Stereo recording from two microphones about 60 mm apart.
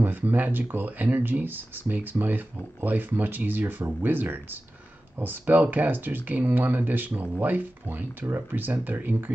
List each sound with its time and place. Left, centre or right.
0.0 s speech: right